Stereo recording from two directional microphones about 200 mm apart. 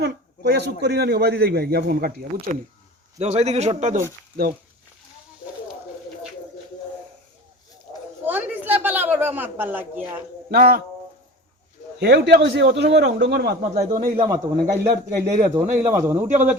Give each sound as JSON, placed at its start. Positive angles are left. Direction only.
{"t": 0.0, "sound": "a man's voice", "side_deg": -55}
{"t": 3.2, "sound": "a man's voice", "side_deg": -35}
{"t": 8.3, "sound": "a sound", "side_deg": -10}
{"t": 10.5, "sound": "a man's voice", "side_deg": -50}
{"t": 11.9, "sound": "a man's voice", "side_deg": -55}
{"t": 13.7, "sound": "a man's voice", "side_deg": -35}
{"t": 14.2, "sound": "a man's voice", "side_deg": -15}